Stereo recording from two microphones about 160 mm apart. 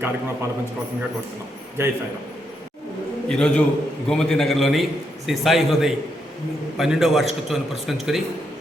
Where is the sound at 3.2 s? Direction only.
5° left (ahead or behind).